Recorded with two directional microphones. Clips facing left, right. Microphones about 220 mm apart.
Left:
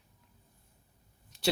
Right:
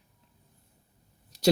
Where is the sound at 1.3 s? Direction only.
40° right (ahead or behind).